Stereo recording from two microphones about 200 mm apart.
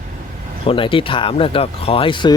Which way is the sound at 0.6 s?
25° left (ahead or behind).